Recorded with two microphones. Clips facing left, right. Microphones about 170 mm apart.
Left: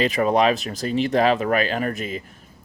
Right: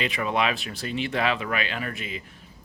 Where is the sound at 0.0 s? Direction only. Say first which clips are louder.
Left 7 dB; 40° left (ahead or behind).